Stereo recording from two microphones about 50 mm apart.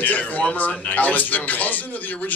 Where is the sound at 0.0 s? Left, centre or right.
Left.